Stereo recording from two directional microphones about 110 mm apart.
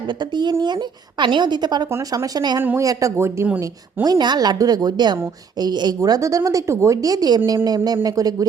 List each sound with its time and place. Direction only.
1.2 s a woman's voice: 45° right (ahead or behind)
2.6 s speech: 25° right (ahead or behind)
4.0 s a woman's voice: 40° right (ahead or behind)